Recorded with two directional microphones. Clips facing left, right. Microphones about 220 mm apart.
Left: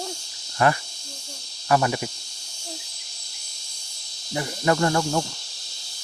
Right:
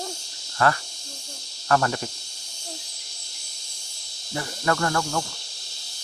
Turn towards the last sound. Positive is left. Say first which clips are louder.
# left 4 dB
turn(degrees=20)  # may be behind; listen again after turning